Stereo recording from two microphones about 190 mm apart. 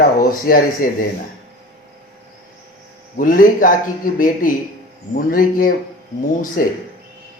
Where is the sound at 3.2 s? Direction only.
45° left (ahead or behind).